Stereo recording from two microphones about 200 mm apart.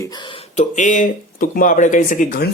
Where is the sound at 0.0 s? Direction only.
20° left (ahead or behind).